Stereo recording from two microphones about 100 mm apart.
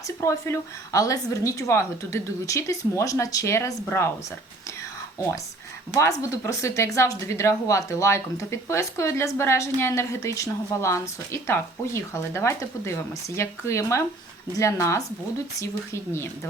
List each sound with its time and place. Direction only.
0.2 s a woman's voice: 25° left (ahead or behind)
5.9 s a woman's voice: 30° left (ahead or behind)